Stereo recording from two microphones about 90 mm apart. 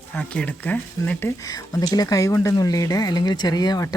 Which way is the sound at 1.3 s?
40° left (ahead or behind).